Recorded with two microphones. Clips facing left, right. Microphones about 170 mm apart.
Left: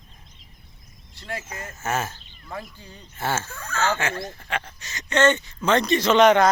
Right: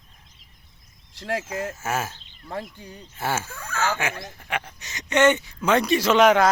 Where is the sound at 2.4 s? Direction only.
30° right (ahead or behind).